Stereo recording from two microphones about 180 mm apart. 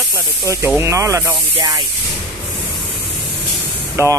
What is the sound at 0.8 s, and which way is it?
Speech, 15° right (ahead or behind).